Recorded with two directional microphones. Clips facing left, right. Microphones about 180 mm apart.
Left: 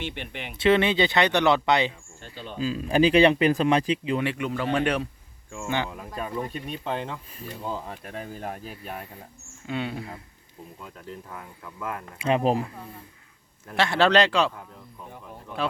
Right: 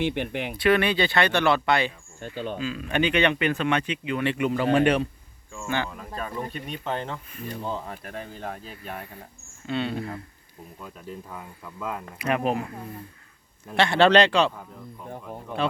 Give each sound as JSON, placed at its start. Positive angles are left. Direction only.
{"t": 0.1, "sound": "speech", "side_deg": -50}
{"t": 0.5, "sound": "speech", "side_deg": 25}
{"t": 2.2, "sound": "speech", "side_deg": -50}
{"t": 2.6, "sound": "speech", "side_deg": 35}
{"t": 4.4, "sound": "speech", "side_deg": -5}
{"t": 5.6, "sound": "speech", "side_deg": 15}
{"t": 11.0, "sound": "speech", "side_deg": -15}
{"t": 12.2, "sound": "speech", "side_deg": 30}
{"t": 13.7, "sound": "speech", "side_deg": 0}